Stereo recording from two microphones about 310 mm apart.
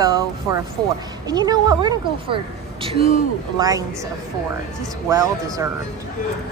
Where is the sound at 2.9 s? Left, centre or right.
Left.